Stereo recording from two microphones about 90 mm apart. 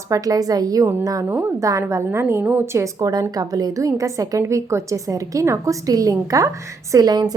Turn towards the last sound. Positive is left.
turn(degrees=-45)  # may be behind; listen again after turning